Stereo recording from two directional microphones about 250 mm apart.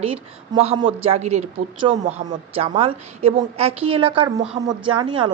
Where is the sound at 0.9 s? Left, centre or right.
Right.